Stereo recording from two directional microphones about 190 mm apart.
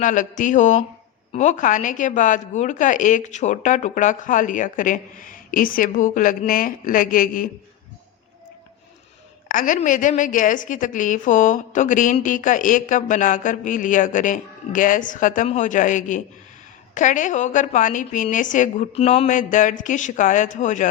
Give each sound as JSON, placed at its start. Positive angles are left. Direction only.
{"t": 0.0, "sound": "a woman's voice", "side_deg": 40}
{"t": 9.5, "sound": "a woman's voice", "side_deg": 45}